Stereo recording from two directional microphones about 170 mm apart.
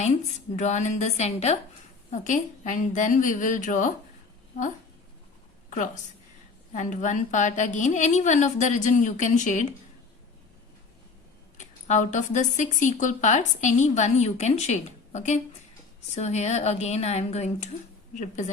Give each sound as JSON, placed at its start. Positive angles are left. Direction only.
{"t": 0.5, "sound": "speech", "side_deg": 45}
{"t": 5.7, "sound": "a woman's voice", "side_deg": 45}
{"t": 11.5, "sound": "a woman's voice", "side_deg": 45}